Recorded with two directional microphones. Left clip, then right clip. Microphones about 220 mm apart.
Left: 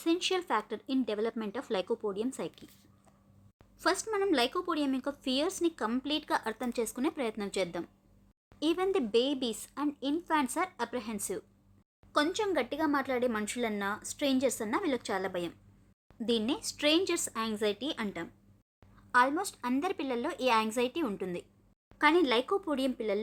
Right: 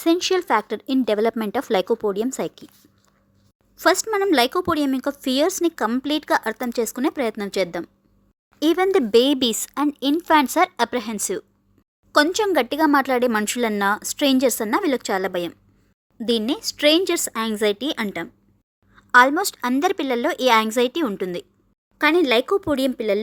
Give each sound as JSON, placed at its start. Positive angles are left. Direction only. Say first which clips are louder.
{"t": 0.0, "sound": "speech", "louder": "right 11 dB", "side_deg": -30}
{"t": 3.8, "sound": "speech", "louder": "right 12 dB", "side_deg": -35}